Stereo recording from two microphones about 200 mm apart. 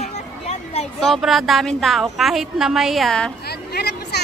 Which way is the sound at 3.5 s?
55° left (ahead or behind).